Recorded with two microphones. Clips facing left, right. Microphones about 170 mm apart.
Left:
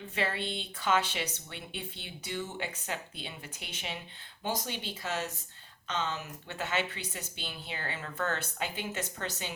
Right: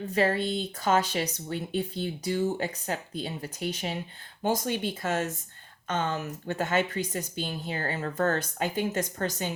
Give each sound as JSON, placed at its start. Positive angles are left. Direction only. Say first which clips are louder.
{"t": 0.1, "sound": "speech", "louder": "right 8 dB", "side_deg": -40}